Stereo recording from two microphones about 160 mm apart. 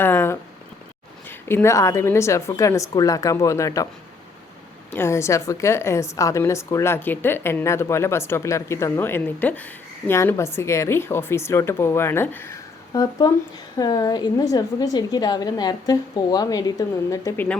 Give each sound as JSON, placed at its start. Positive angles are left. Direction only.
{"t": 0.0, "sound": "a sound", "side_deg": 15}
{"t": 1.3, "sound": "a woman's voice", "side_deg": 15}
{"t": 4.9, "sound": "a woman's voice", "side_deg": 15}